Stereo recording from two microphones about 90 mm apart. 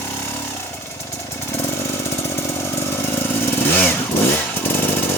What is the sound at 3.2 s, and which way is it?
Motorcycle, 25° left (ahead or behind).